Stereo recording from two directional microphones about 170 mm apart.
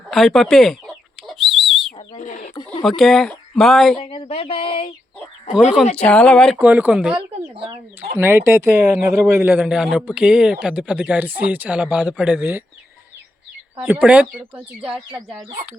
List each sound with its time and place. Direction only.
0.1 s speech: centre (ahead or behind)
1.3 s whistle: centre (ahead or behind)
2.1 s chicken: 45° left (ahead or behind)
2.6 s speech: centre (ahead or behind)
3.9 s speech: 30° left (ahead or behind)
6.0 s speech: 5° left (ahead or behind)
6.6 s a man's voice: 10° right (ahead or behind)
7.2 s speech: 30° right (ahead or behind)
8.1 s a man's voice: 15° right (ahead or behind)
13.7 s a man's voice: 10° right (ahead or behind)